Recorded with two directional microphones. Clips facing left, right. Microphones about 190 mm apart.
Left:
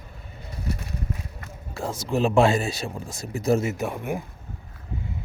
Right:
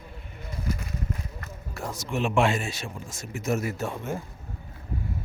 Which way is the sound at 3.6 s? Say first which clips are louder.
Left 3 dB; 15° left (ahead or behind).